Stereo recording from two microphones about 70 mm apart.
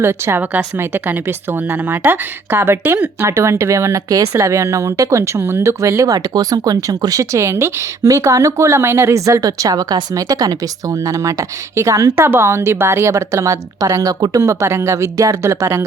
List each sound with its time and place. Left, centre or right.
0.0 s speech: right
6.1 s speech: right
9.1 s speech: right
12.1 s speech: right
14.4 s speech: right